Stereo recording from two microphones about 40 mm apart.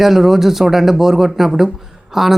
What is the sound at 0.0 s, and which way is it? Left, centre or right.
Speech, centre.